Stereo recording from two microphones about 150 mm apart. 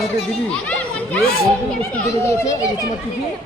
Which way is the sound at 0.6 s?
10° left (ahead or behind).